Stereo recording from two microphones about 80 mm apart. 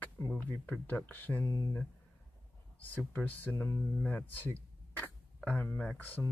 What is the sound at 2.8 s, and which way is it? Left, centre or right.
Speech, left.